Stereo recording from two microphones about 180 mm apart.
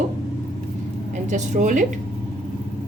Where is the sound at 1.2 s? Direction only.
45° right (ahead or behind).